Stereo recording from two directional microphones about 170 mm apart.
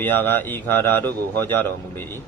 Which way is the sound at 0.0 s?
10° left (ahead or behind).